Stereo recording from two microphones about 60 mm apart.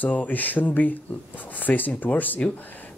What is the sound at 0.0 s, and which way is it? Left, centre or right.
Speech, left.